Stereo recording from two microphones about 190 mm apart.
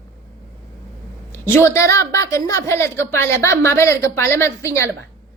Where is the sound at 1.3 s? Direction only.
15° left (ahead or behind).